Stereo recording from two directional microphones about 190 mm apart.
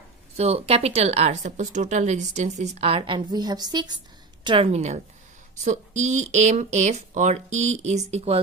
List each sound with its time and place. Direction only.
0.4 s speech: 30° right (ahead or behind)